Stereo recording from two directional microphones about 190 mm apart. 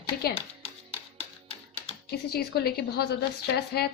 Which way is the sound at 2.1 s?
55° left (ahead or behind).